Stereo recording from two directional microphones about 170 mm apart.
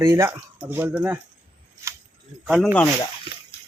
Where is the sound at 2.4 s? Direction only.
5° right (ahead or behind).